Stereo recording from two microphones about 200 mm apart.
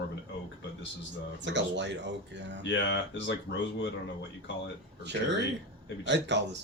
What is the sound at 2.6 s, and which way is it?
Speech, 65° left (ahead or behind).